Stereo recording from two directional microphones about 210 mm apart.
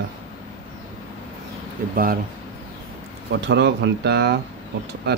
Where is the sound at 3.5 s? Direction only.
50° right (ahead or behind).